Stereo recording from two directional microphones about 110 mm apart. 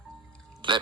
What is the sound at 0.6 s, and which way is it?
Speech, 50° right (ahead or behind).